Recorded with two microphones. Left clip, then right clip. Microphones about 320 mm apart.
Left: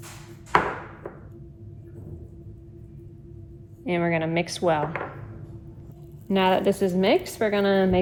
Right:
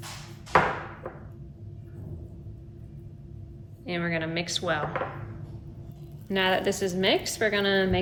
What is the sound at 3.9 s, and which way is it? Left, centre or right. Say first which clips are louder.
A woman's voice: left 5 dB; centre.